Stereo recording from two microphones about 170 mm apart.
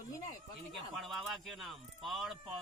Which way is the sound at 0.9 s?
Centre (ahead or behind).